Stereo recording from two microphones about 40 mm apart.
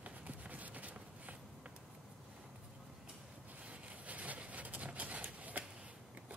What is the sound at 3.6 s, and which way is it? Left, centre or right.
Vehicle, right.